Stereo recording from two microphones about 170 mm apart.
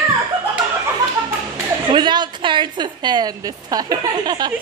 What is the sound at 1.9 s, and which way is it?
A woman's voice, 25° right (ahead or behind).